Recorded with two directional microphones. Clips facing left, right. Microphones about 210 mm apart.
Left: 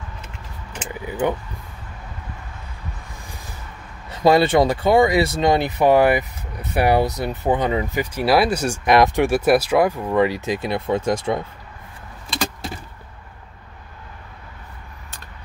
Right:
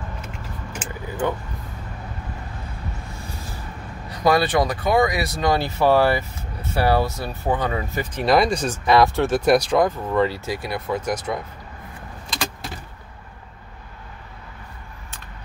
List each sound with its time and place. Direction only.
0.8 s vehicle: 15° left (ahead or behind)
4.1 s speech: 25° left (ahead or behind)